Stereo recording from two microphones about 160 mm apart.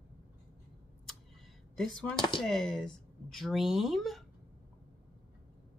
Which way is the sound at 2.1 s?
30° left (ahead or behind).